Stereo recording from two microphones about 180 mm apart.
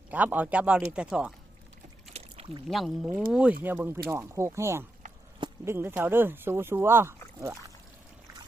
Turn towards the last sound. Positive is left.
turn(degrees=-15)  # may be behind; listen again after turning